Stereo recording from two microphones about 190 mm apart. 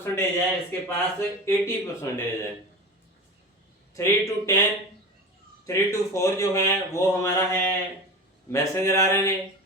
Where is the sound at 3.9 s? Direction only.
15° left (ahead or behind).